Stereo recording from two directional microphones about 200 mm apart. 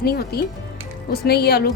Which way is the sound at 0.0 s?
50° left (ahead or behind).